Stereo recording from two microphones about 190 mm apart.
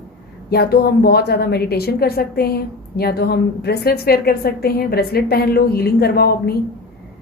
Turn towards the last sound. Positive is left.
turn(degrees=55)  # may be behind; listen again after turning